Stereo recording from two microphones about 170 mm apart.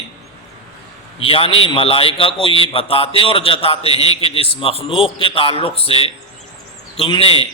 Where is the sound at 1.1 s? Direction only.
35° left (ahead or behind).